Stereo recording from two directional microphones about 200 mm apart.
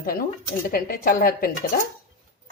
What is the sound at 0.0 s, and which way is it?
Speech, 45° left (ahead or behind).